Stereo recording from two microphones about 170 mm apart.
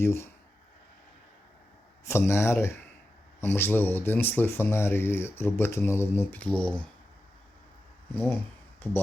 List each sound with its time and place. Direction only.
0.0 s speech: 15° left (ahead or behind)
2.0 s speech: 15° left (ahead or behind)
8.1 s speech: 15° left (ahead or behind)